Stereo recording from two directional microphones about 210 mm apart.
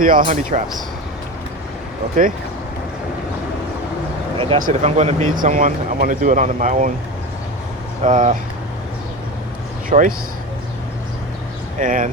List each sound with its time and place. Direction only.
0.2 s speech: 30° right (ahead or behind)
4.4 s speech: 25° right (ahead or behind)
8.0 s speech: 35° right (ahead or behind)
9.9 s speech: 35° right (ahead or behind)
11.8 s speech: 40° right (ahead or behind)